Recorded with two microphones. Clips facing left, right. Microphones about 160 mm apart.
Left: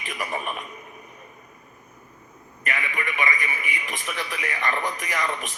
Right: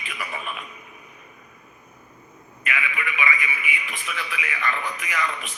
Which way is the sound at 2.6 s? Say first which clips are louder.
Even; 40° left (ahead or behind).